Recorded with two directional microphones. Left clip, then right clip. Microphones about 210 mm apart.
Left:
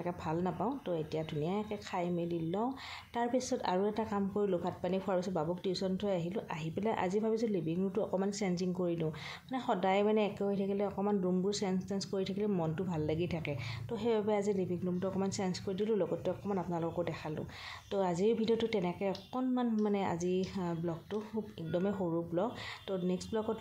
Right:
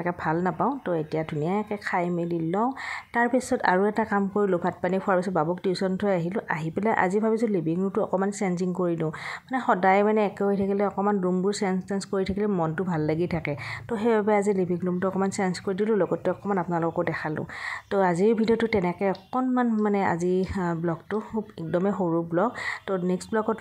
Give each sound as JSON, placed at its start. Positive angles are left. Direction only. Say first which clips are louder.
{"t": 0.0, "sound": "a woman's voice", "louder": "right 10 dB", "side_deg": -20}
{"t": 3.2, "sound": "a woman's voice", "louder": "right 10 dB", "side_deg": -20}